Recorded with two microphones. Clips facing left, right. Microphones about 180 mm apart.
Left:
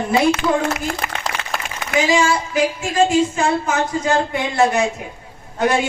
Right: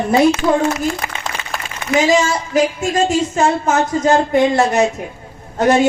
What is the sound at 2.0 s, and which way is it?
Speech, 40° right (ahead or behind).